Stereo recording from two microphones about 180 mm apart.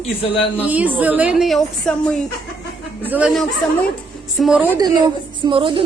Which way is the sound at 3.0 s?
10° right (ahead or behind).